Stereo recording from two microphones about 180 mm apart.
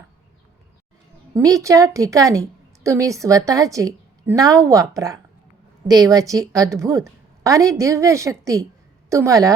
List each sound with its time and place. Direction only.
1.3 s a woman's voice: 20° right (ahead or behind)